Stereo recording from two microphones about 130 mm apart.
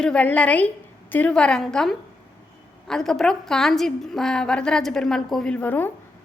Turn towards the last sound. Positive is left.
turn(degrees=15)  # may be behind; listen again after turning